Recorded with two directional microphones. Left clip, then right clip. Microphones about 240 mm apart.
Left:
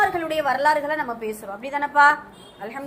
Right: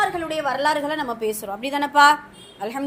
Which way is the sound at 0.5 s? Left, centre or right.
Centre.